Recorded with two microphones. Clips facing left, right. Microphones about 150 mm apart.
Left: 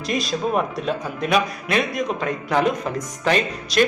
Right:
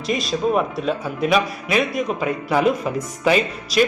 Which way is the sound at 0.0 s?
Centre (ahead or behind).